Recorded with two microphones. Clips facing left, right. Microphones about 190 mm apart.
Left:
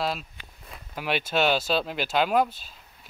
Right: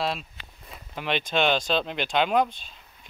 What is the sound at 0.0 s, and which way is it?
Speech, centre (ahead or behind).